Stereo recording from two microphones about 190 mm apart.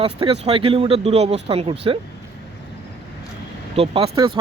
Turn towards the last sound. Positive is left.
turn(degrees=-20)  # may be behind; listen again after turning